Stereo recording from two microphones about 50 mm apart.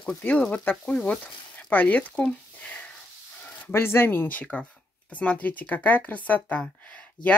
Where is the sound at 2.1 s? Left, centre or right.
Left.